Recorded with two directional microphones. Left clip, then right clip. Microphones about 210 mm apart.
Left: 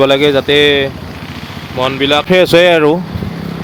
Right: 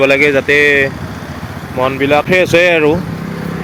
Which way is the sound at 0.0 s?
20° left (ahead or behind).